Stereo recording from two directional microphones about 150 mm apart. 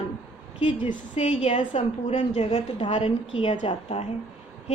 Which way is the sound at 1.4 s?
40° left (ahead or behind).